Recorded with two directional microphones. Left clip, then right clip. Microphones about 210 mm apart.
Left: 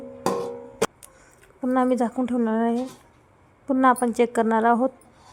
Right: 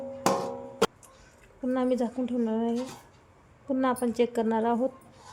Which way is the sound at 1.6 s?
10° left (ahead or behind).